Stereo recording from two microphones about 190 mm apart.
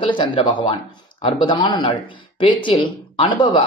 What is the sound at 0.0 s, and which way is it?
Speech, 25° left (ahead or behind).